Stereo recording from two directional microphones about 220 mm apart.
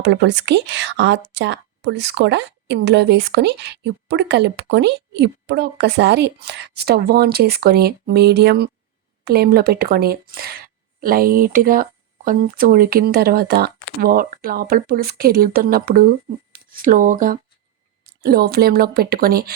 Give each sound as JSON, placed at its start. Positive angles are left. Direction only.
{"t": 0.0, "sound": "speech", "side_deg": -50}